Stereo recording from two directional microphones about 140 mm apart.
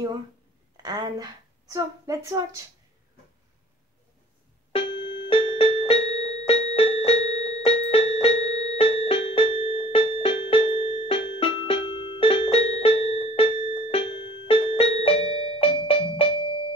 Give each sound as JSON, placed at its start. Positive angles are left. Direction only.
{"t": 0.8, "sound": "a woman's voice", "side_deg": -30}
{"t": 4.7, "sound": "music", "side_deg": 40}